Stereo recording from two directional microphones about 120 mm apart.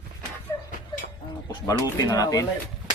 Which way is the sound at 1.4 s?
30° left (ahead or behind).